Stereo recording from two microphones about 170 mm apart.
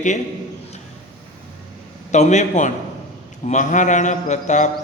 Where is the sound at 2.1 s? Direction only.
45° left (ahead or behind).